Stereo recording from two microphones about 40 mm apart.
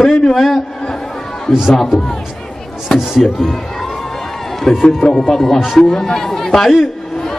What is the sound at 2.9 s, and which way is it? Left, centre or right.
Speech, centre.